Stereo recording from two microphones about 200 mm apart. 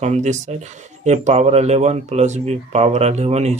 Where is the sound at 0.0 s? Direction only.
35° right (ahead or behind).